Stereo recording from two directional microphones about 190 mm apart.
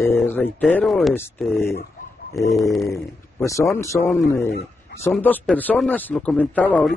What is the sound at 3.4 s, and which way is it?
Speech, 15° left (ahead or behind).